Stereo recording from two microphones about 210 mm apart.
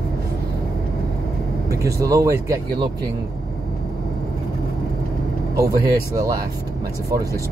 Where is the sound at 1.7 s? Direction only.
15° right (ahead or behind).